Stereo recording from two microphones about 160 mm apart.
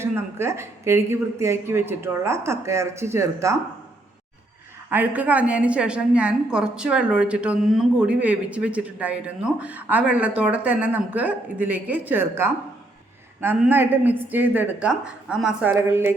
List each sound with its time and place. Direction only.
0.0 s a woman's voice: 15° right (ahead or behind)
4.9 s a woman's voice: 10° right (ahead or behind)